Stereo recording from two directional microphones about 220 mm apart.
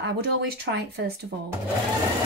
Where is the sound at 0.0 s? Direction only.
50° right (ahead or behind).